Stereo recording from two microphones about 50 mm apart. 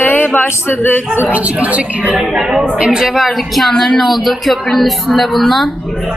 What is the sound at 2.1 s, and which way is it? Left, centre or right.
Speech, centre.